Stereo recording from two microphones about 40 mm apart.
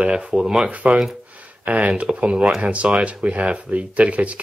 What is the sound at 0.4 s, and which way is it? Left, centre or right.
Speech, centre.